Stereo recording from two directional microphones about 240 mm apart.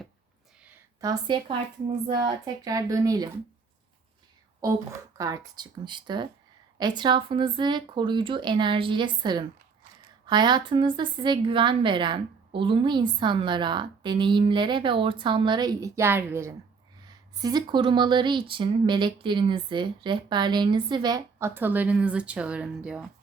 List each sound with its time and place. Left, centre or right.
0.6 s a sound: centre
2.0 s speech: centre
5.1 s a woman's voice: centre